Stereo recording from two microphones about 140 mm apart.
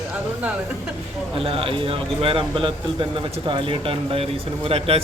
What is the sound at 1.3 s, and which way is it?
Speech, 40° right (ahead or behind).